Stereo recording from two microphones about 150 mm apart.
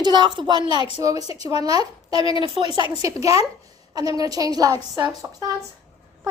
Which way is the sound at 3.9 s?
25° right (ahead or behind).